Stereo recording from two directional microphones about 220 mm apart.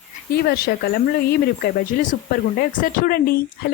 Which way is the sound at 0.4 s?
45° left (ahead or behind).